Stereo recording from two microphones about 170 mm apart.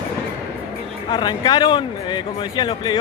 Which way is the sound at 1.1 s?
25° left (ahead or behind).